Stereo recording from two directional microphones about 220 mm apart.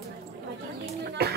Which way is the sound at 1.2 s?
45° right (ahead or behind).